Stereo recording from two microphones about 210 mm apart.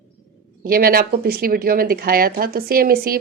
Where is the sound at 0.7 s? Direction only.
45° right (ahead or behind).